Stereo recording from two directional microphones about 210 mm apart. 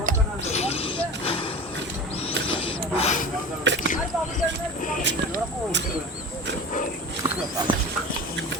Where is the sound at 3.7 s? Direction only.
55° right (ahead or behind).